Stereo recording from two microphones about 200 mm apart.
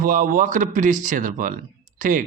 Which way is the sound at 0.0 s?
45° right (ahead or behind).